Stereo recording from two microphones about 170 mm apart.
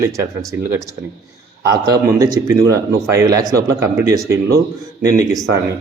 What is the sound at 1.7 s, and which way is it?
Speech, 20° right (ahead or behind).